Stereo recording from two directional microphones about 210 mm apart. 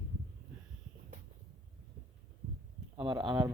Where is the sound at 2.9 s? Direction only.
20° right (ahead or behind).